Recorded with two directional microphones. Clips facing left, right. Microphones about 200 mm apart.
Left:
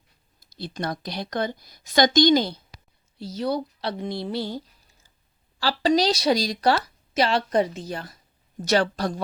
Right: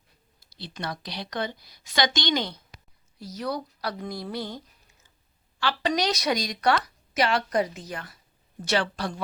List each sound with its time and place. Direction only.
0.5 s a woman's voice: 45° left (ahead or behind)